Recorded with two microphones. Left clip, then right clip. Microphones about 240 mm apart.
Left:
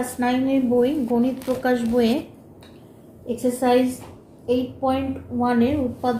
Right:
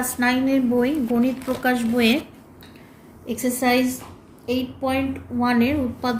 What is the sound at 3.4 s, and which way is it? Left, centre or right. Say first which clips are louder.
A woman's voice: left 1 dB; right.